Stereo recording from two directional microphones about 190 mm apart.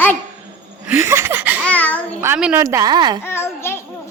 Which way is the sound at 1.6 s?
10° left (ahead or behind).